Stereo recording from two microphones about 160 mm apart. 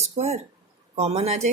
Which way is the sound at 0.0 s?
45° right (ahead or behind).